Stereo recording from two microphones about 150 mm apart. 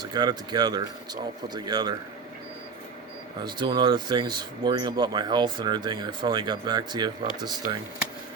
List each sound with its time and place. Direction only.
0.0 s speech: 25° right (ahead or behind)
3.4 s speech: 30° right (ahead or behind)